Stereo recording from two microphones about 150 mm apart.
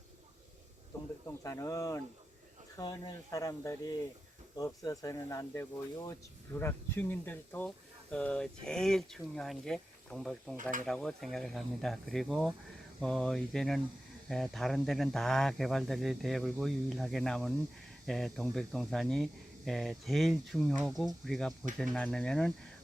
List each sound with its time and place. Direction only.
1.3 s speech: 20° left (ahead or behind); by 22.5 s 5° left (ahead or behind)